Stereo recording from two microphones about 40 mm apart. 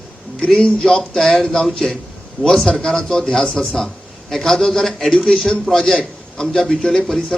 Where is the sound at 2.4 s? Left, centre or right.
Right.